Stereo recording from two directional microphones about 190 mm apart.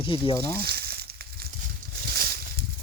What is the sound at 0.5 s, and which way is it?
Frying, 55° right (ahead or behind).